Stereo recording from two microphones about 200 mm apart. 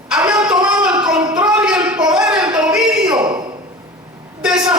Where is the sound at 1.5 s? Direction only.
5° right (ahead or behind).